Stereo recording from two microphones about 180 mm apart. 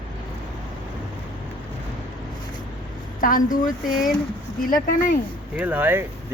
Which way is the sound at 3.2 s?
50° left (ahead or behind).